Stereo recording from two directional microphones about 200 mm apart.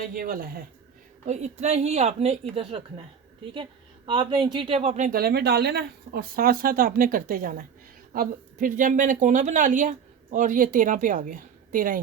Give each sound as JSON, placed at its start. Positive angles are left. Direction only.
{"t": 0.0, "sound": "speech", "side_deg": -45}
{"t": 1.3, "sound": "a woman's voice", "side_deg": -35}